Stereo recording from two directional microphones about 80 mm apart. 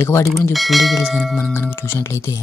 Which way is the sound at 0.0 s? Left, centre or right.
Left.